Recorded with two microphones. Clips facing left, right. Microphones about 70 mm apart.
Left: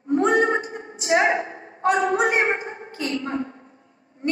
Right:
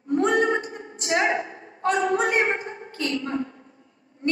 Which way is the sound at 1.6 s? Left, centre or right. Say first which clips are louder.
Left 3 dB; left.